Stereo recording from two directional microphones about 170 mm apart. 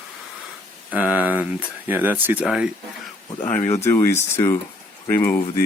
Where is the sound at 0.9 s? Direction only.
10° right (ahead or behind).